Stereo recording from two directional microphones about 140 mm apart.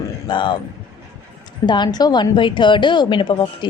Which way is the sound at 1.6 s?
30° left (ahead or behind).